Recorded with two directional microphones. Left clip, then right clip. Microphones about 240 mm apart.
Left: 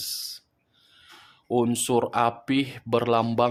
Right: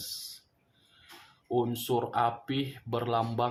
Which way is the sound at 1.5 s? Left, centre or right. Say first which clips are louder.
Left 6 dB; left.